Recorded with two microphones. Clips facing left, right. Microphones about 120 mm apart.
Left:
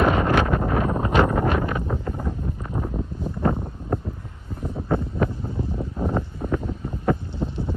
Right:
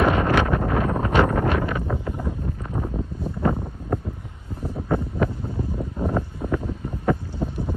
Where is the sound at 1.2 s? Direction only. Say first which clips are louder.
Even; 15° left (ahead or behind).